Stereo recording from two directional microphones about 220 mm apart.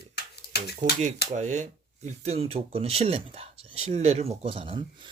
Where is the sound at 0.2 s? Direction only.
45° left (ahead or behind).